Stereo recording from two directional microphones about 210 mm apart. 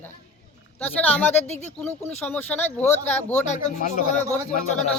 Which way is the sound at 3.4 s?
35° left (ahead or behind).